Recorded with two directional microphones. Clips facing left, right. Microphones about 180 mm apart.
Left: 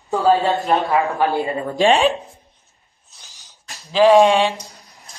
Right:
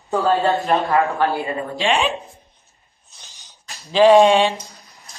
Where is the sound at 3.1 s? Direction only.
Centre (ahead or behind).